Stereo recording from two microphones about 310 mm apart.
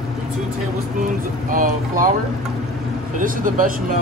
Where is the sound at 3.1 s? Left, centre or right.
Right.